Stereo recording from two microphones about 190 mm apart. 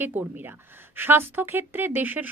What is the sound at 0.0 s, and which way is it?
A woman's voice, 10° right (ahead or behind).